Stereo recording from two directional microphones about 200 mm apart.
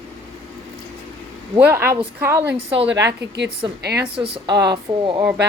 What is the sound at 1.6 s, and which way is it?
Speech, 10° right (ahead or behind).